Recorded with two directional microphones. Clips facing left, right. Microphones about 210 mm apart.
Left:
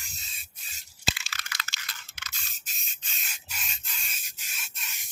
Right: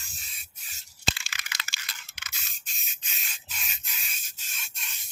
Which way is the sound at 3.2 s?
5° left (ahead or behind).